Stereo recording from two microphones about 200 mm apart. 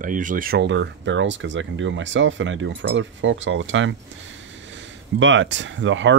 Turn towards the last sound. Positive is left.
turn(degrees=-70)  # may be behind; listen again after turning